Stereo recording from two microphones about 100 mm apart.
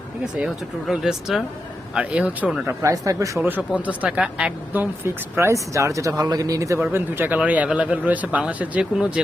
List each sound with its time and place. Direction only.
0.3 s speech: 5° right (ahead or behind)
2.0 s speech: 15° right (ahead or behind)
2.6 s a woman's voice: 35° right (ahead or behind)
3.7 s a woman's voice: 15° right (ahead or behind); by 6.7 s 35° right (ahead or behind)
6.9 s speech: 20° right (ahead or behind)